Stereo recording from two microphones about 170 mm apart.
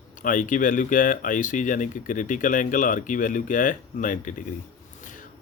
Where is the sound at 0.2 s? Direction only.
50° left (ahead or behind).